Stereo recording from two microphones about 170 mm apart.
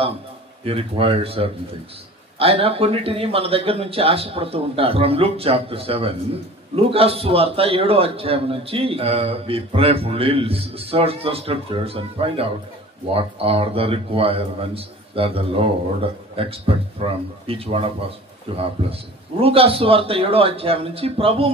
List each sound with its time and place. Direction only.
0.7 s a man's voice: 35° right (ahead or behind)